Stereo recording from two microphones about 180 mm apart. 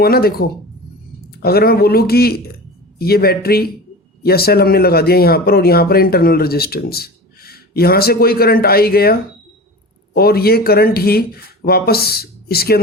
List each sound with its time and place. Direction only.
0.0 s speech: 60° left (ahead or behind)
10.2 s speech: 60° left (ahead or behind)